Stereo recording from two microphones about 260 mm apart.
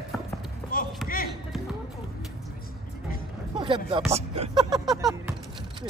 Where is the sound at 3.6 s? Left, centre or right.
Centre.